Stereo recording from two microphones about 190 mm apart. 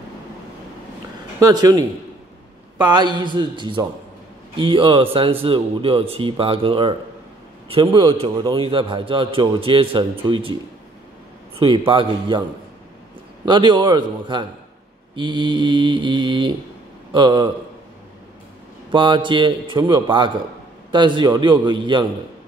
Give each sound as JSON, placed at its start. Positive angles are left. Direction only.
{"t": 1.4, "sound": "a man's voice", "side_deg": -20}
{"t": 13.5, "sound": "a man's voice", "side_deg": -25}
{"t": 18.9, "sound": "a man's voice", "side_deg": -25}